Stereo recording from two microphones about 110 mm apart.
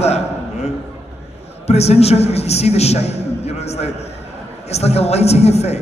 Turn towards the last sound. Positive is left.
turn(degrees=75)  # may be behind; listen again after turning